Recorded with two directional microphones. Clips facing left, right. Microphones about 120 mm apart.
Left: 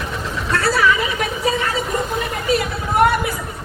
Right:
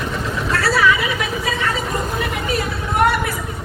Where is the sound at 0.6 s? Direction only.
40° left (ahead or behind).